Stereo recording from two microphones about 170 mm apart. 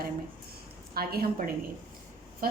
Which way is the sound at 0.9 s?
60° right (ahead or behind).